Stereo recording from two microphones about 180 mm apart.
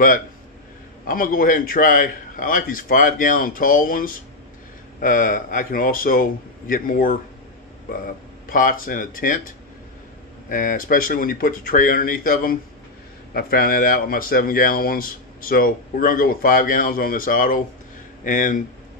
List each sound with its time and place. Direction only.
1.0 s speech: 50° left (ahead or behind)
8.5 s speech: 50° left (ahead or behind)
10.5 s speech: 50° left (ahead or behind)